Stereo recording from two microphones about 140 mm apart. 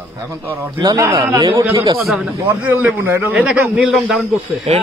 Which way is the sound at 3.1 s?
15° right (ahead or behind).